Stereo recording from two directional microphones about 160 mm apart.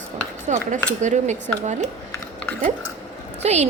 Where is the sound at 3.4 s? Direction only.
45° right (ahead or behind).